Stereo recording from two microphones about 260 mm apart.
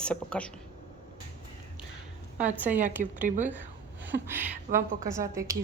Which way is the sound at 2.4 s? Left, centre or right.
Centre.